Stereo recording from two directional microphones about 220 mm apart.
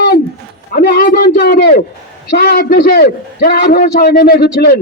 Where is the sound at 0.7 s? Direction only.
45° left (ahead or behind).